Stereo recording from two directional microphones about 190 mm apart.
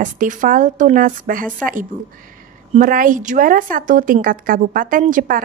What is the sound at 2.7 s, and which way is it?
A woman's voice, 45° right (ahead or behind).